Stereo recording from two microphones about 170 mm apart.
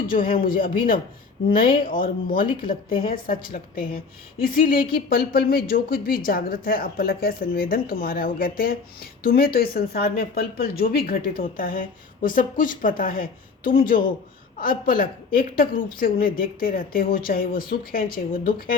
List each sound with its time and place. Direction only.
0.3 s a man's voice: 55° left (ahead or behind)
1.5 s speech: 30° left (ahead or behind)
3.1 s a woman's voice: 55° left (ahead or behind)